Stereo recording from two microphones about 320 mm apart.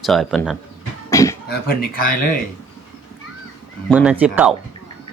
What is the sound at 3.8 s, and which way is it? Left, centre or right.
Speech, centre.